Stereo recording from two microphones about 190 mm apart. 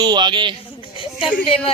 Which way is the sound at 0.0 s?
25° right (ahead or behind).